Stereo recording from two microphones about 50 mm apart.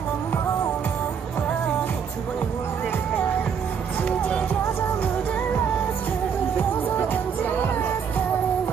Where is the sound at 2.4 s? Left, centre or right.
Left.